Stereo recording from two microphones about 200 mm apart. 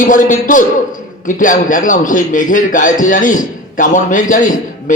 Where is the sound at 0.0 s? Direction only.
40° left (ahead or behind).